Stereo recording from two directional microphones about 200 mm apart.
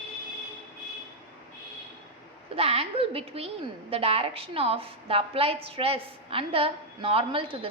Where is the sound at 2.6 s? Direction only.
30° right (ahead or behind).